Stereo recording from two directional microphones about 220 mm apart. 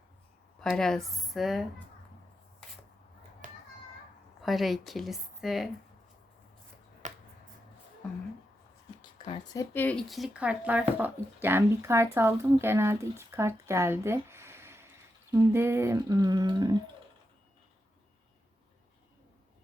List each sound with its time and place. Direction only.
0.6 s a woman's voice: centre (ahead or behind)
3.4 s children playing: 35° right (ahead or behind)
4.4 s a woman's voice: centre (ahead or behind)
7.0 s finger snapping: 35° right (ahead or behind)
9.0 s speech: 20° left (ahead or behind); by 16.9 s 20° right (ahead or behind)